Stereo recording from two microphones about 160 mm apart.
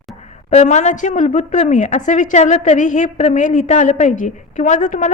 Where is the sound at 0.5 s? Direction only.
45° left (ahead or behind).